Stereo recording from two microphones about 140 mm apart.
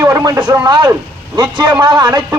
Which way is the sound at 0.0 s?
25° right (ahead or behind).